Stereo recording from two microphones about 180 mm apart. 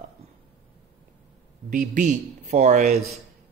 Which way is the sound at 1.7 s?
45° right (ahead or behind).